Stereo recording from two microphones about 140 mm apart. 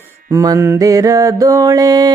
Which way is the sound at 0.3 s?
25° right (ahead or behind).